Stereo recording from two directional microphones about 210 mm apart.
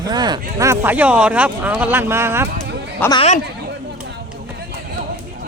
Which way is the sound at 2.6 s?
55° right (ahead or behind).